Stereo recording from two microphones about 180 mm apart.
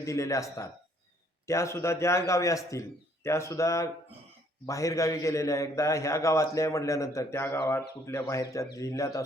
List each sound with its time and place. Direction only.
0.0 s a man's voice: 15° left (ahead or behind)